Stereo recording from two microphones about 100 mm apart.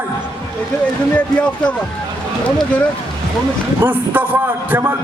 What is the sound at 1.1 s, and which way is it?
Speech, 15° left (ahead or behind).